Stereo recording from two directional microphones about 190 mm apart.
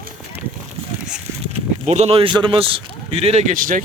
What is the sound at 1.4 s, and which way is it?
Speech, 35° right (ahead or behind).